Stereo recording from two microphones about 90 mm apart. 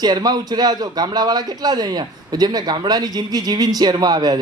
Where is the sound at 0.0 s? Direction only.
50° right (ahead or behind).